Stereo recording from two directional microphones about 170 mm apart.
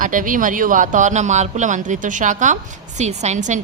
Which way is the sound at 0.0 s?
50° right (ahead or behind).